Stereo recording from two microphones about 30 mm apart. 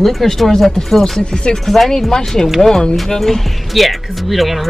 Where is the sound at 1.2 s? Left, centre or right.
Left.